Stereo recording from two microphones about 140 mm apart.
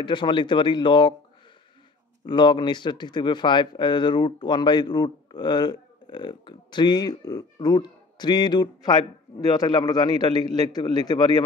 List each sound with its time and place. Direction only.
0.0 s speech: 35° left (ahead or behind)
2.2 s speech: 35° left (ahead or behind)